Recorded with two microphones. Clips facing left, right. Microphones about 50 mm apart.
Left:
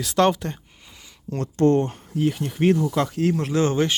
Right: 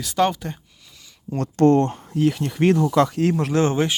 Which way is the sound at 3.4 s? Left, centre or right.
Right.